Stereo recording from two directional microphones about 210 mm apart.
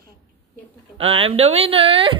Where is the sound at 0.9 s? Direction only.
30° right (ahead or behind).